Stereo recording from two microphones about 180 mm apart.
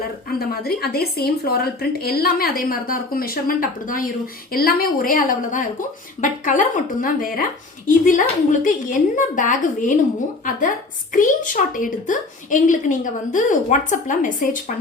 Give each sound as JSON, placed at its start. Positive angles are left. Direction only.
{"t": 0.3, "sound": "a woman's voice", "side_deg": 60}
{"t": 11.1, "sound": "a woman's voice", "side_deg": 45}